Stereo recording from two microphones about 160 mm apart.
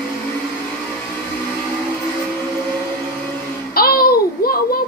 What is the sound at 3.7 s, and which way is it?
Babbling, 70° left (ahead or behind).